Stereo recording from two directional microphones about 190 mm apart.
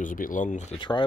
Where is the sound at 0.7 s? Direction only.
25° left (ahead or behind).